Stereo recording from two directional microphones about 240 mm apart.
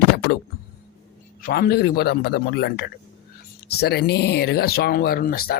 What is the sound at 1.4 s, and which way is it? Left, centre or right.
Speech, left.